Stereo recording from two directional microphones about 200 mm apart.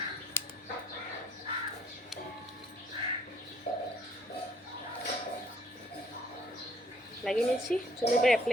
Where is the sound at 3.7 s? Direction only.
45° left (ahead or behind).